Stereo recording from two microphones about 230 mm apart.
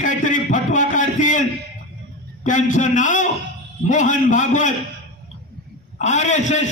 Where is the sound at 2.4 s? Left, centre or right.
Left.